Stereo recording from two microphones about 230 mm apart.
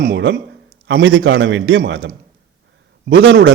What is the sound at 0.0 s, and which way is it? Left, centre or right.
A man's voice, right.